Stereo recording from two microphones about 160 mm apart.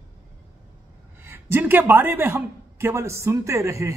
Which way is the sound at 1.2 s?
15° right (ahead or behind).